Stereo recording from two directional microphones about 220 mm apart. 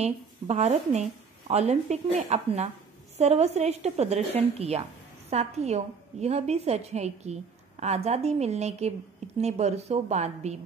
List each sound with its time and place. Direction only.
0.0 s a woman's voice: 30° right (ahead or behind)